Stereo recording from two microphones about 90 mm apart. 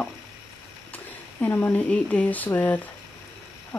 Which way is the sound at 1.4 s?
20° left (ahead or behind).